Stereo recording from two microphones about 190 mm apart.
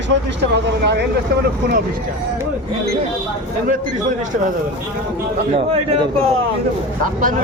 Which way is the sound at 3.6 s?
45° right (ahead or behind).